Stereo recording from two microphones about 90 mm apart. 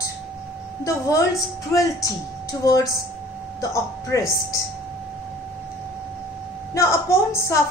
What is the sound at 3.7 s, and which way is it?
Speech, 35° left (ahead or behind).